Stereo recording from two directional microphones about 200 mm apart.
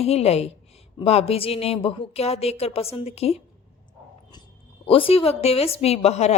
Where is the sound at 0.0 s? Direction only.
30° left (ahead or behind).